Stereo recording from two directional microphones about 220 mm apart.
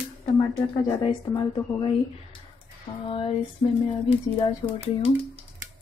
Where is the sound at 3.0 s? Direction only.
25° left (ahead or behind).